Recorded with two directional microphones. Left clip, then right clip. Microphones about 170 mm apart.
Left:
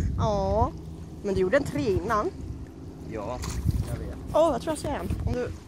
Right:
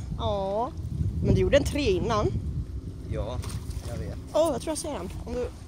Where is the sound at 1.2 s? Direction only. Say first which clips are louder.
Right 1 dB; 25° right (ahead or behind).